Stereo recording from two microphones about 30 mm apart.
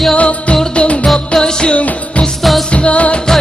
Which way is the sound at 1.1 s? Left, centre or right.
Left.